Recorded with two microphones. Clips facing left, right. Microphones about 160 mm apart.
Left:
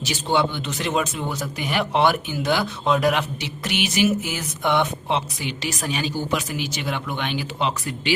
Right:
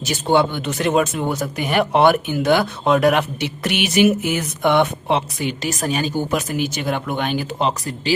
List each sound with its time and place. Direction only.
0.0 s speech: 50° right (ahead or behind)